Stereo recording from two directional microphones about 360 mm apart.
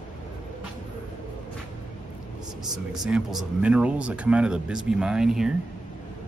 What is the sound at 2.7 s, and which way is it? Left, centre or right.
Speech, centre.